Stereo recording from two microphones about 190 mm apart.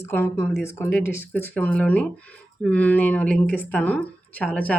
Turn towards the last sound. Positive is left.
turn(degrees=5)  # may be behind; listen again after turning